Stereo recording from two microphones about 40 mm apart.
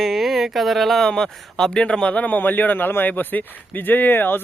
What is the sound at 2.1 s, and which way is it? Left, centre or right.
Speech, left.